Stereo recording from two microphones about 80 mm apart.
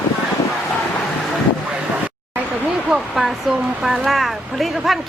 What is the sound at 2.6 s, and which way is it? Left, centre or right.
Speech, centre.